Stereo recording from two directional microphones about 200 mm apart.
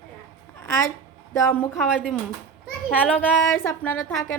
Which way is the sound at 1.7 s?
Centre (ahead or behind).